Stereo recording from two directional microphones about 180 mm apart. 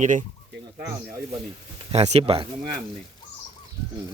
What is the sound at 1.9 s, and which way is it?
Speech, 35° right (ahead or behind).